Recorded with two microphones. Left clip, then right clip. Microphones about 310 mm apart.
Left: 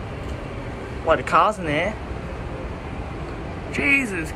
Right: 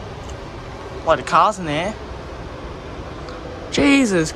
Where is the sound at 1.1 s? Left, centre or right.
Centre.